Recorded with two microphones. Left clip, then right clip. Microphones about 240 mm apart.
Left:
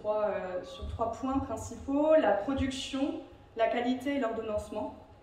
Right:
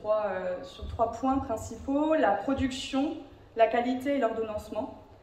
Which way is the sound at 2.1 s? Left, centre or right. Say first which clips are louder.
Left 1 dB; centre.